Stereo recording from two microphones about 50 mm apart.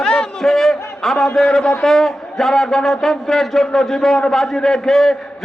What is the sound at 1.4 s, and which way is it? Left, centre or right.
A man's voice, centre.